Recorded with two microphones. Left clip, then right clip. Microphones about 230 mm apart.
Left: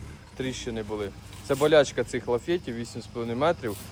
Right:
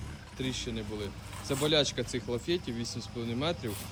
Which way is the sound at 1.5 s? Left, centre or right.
Left.